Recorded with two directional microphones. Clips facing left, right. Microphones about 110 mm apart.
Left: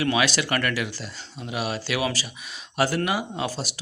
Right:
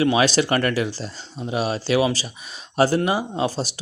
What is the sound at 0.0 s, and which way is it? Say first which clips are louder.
Speech: right 5 dB; 30° right (ahead or behind).